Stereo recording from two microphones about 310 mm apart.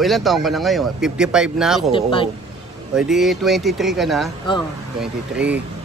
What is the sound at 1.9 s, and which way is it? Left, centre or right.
Speech, centre.